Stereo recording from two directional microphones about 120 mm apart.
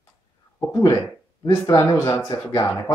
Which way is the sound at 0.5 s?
25° left (ahead or behind).